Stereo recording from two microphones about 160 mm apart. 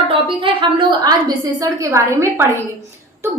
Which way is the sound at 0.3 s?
30° right (ahead or behind).